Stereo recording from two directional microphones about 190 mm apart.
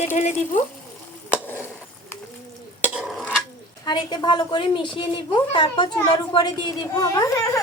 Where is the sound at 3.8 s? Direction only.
25° left (ahead or behind).